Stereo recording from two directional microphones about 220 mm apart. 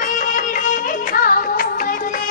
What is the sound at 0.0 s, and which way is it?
Music, 35° left (ahead or behind).